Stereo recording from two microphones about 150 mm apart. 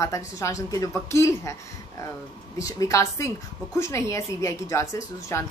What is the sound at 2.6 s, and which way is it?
A woman's voice, 20° left (ahead or behind).